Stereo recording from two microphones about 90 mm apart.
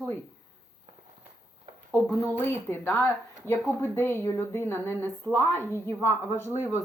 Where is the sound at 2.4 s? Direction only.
25° left (ahead or behind).